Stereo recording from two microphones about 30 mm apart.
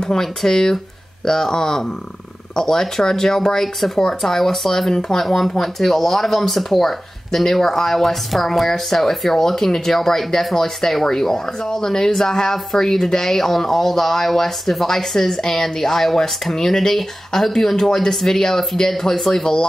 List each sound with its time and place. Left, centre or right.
0.0 s speech: left
3.6 s speech: centre